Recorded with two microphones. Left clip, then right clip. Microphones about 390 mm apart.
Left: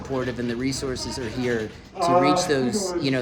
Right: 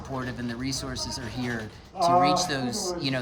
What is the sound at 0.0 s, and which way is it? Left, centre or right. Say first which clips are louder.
Speech: left 6 dB; centre.